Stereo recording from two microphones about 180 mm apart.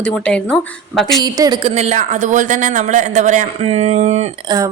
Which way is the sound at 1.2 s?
20° right (ahead or behind).